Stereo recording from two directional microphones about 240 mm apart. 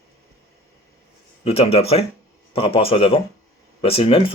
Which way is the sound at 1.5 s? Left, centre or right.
Left.